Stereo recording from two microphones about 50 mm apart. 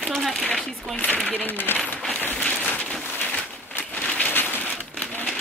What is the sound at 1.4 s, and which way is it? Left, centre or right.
Speech, left.